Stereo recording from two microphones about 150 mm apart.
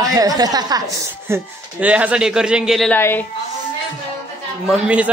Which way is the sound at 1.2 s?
15° right (ahead or behind).